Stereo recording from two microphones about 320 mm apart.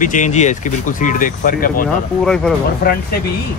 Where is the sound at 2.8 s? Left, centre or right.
Left.